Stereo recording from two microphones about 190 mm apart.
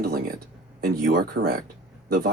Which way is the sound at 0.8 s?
50° right (ahead or behind).